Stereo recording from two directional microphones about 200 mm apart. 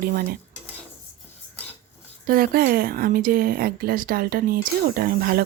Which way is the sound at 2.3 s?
45° right (ahead or behind).